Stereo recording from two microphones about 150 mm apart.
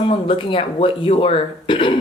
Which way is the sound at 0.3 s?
40° left (ahead or behind).